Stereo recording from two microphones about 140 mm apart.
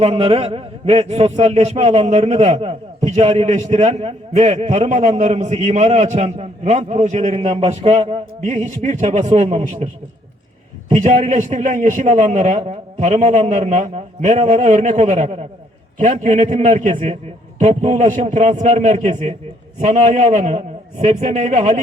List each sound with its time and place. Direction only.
0.0 s a man's voice: 40° right (ahead or behind)
10.9 s a man's voice: 60° right (ahead or behind)